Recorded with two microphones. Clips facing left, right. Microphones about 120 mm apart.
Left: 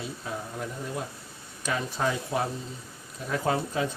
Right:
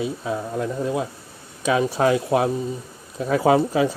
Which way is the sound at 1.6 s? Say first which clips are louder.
Right 10 dB; 75° right (ahead or behind).